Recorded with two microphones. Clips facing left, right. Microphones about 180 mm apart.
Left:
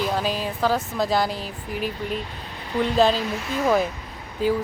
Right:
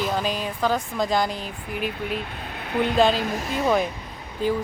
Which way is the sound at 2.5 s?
60° right (ahead or behind).